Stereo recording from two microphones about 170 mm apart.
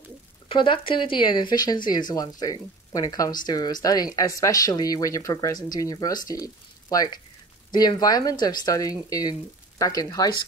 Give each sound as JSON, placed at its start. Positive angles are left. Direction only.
{"t": 0.5, "sound": "speech", "side_deg": 30}